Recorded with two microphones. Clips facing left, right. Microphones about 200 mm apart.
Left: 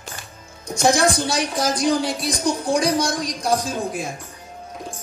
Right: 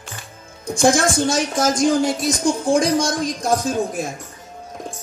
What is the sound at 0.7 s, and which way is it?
A woman's voice, 50° right (ahead or behind).